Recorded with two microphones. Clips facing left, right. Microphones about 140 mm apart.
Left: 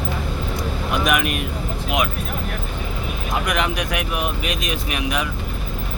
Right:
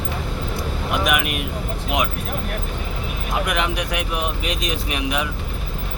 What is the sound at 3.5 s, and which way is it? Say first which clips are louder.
Speech: left 3 dB; 25° right (ahead or behind).